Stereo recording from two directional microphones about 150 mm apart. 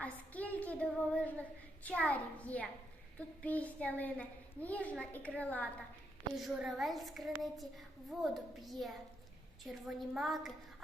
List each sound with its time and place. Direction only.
0.0 s a sound: 10° left (ahead or behind)
3.2 s a woman's voice: 10° left (ahead or behind)
6.3 s a child's voice: 5° right (ahead or behind)